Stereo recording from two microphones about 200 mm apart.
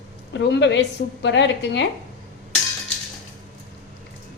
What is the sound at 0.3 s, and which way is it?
A woman's voice, 60° left (ahead or behind).